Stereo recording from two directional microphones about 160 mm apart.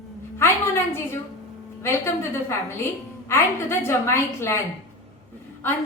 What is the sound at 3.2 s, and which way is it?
A woman's voice, 15° left (ahead or behind).